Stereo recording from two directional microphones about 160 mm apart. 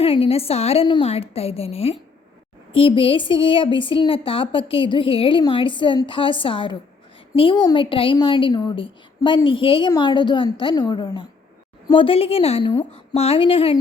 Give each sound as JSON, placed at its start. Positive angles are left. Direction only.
{"t": 0.0, "sound": "a woman's voice", "side_deg": 40}